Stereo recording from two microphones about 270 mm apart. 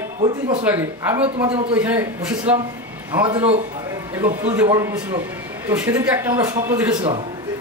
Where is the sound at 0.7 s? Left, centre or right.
Centre.